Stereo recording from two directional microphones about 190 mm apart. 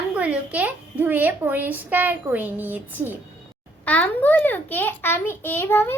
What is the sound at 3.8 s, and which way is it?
A child's voice, 10° left (ahead or behind).